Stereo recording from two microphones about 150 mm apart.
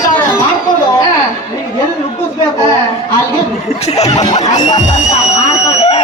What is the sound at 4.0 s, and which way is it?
Snicker, 50° left (ahead or behind).